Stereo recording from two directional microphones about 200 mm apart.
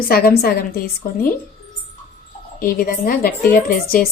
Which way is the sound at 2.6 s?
45° left (ahead or behind).